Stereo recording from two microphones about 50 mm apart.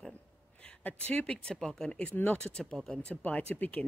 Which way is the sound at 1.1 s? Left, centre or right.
Centre.